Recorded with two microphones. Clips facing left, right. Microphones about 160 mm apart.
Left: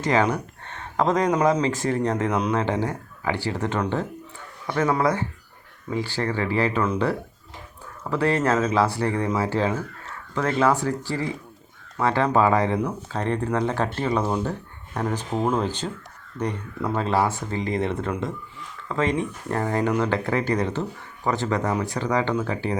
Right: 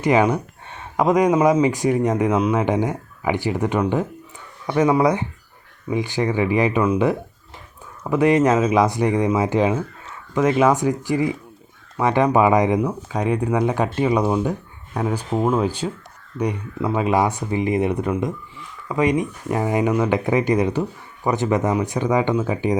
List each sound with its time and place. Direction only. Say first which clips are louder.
0.0 s speech: right 4 dB; 15° right (ahead or behind)